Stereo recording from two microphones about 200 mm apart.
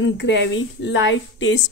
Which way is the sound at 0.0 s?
65° left (ahead or behind).